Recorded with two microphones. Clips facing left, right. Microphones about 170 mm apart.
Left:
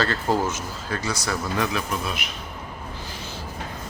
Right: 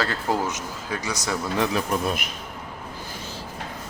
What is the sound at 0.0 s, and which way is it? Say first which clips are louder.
Speech: left 2 dB; 10° right (ahead or behind).